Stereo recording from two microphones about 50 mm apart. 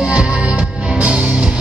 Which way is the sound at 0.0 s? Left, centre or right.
Right.